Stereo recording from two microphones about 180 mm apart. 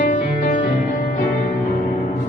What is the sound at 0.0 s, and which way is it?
Music, 45° left (ahead or behind).